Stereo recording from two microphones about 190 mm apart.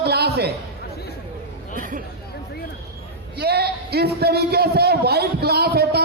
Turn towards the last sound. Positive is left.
turn(degrees=-55)  # may be behind; listen again after turning